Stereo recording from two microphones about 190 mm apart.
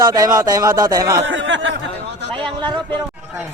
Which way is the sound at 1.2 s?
75° right (ahead or behind).